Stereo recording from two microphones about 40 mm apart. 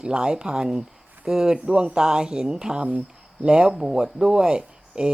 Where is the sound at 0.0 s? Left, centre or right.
Right.